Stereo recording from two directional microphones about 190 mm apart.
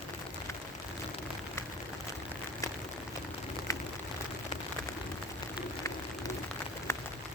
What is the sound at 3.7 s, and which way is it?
Rain on surface, 15° left (ahead or behind).